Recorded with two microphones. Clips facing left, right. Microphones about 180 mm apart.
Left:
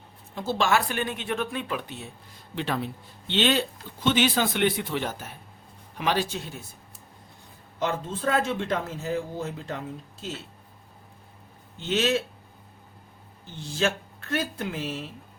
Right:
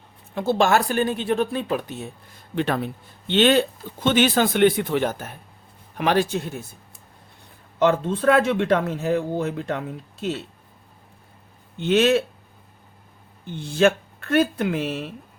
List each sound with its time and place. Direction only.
0.3 s speech: 55° right (ahead or behind)
7.8 s speech: 70° right (ahead or behind)
11.8 s speech: 60° right (ahead or behind)
13.5 s speech: 60° right (ahead or behind)